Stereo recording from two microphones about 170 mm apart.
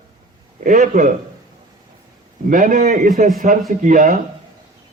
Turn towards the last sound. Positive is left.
turn(degrees=-50)  # may be behind; listen again after turning